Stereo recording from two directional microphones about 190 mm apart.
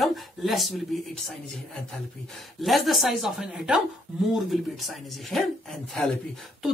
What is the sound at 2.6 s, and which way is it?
Speech, centre (ahead or behind).